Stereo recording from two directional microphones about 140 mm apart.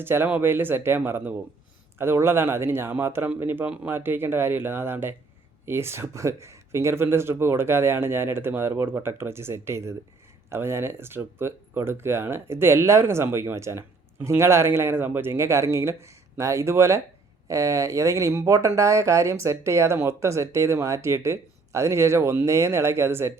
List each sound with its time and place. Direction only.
0.0 s speech: 15° right (ahead or behind)